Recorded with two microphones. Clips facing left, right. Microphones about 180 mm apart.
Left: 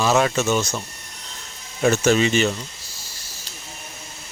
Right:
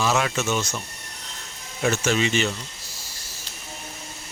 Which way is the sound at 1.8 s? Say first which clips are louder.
Left 5 dB; 40° left (ahead or behind).